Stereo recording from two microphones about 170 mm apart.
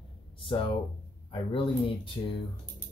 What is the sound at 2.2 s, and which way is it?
Speech, 25° left (ahead or behind).